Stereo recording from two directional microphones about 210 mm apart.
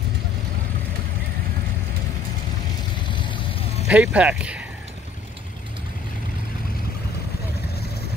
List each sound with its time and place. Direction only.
3.1 s vehicle: 25° left (ahead or behind)
3.8 s speech: 5° right (ahead or behind)